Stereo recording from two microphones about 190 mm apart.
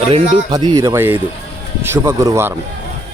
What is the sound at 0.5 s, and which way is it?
Speech, 20° right (ahead or behind).